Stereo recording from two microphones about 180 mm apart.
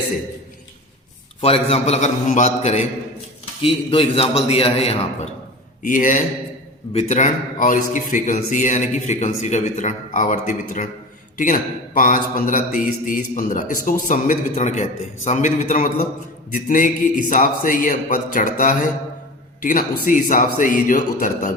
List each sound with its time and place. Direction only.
1.4 s a man's voice: 35° left (ahead or behind)
5.8 s speech: 45° left (ahead or behind)